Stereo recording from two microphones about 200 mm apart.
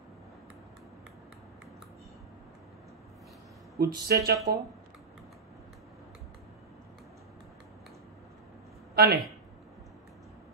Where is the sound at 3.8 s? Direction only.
50° right (ahead or behind).